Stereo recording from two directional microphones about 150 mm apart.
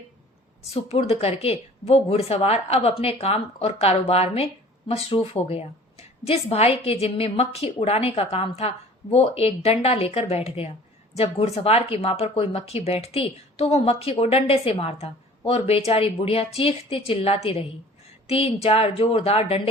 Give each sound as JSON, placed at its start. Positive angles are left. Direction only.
{"t": 0.7, "sound": "a woman's voice", "side_deg": 45}